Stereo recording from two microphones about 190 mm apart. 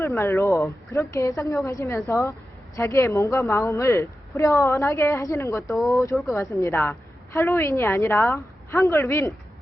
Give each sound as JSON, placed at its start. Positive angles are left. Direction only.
{"t": 0.0, "sound": "a woman's voice", "side_deg": 15}
{"t": 5.6, "sound": "speech", "side_deg": 0}
{"t": 5.9, "sound": "a woman's voice", "side_deg": 15}